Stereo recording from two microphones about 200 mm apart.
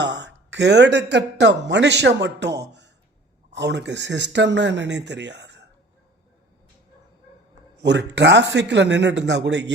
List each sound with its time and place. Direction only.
0.0 s a man's voice: 60° right (ahead or behind)
7.8 s speech: 60° right (ahead or behind)